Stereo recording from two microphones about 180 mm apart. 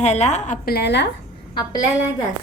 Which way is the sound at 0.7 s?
70° left (ahead or behind).